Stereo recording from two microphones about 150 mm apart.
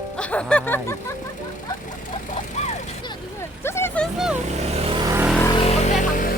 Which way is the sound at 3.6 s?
15° left (ahead or behind).